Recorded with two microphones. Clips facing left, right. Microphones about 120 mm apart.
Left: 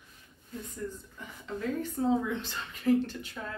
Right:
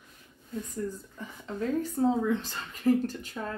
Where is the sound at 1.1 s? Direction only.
35° right (ahead or behind).